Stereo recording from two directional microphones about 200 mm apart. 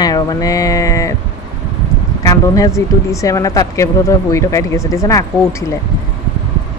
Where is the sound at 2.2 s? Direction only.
15° left (ahead or behind).